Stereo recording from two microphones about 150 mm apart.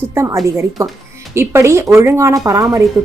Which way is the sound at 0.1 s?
20° right (ahead or behind).